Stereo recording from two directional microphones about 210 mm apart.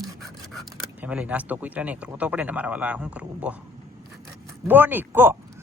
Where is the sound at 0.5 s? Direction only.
Centre (ahead or behind).